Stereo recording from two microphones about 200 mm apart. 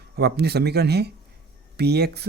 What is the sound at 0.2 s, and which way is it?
Speech, 55° right (ahead or behind).